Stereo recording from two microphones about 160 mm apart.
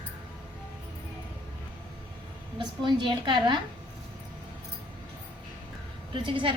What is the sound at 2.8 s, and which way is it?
Speech, 30° right (ahead or behind).